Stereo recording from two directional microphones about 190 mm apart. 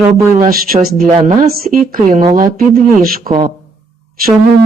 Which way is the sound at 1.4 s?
50° right (ahead or behind).